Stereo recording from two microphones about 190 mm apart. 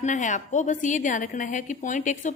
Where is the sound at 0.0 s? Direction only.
40° left (ahead or behind).